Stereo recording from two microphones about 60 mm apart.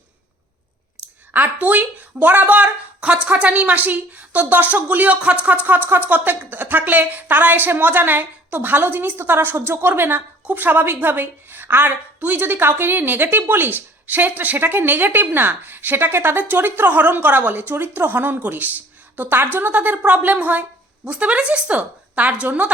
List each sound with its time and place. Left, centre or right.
1.3 s a woman's voice: right